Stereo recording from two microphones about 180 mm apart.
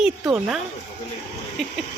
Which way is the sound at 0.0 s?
5° right (ahead or behind).